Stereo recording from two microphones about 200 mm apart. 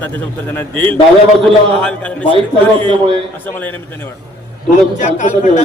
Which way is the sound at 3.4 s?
10° left (ahead or behind).